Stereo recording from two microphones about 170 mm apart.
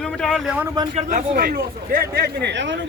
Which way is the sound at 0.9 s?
50° right (ahead or behind).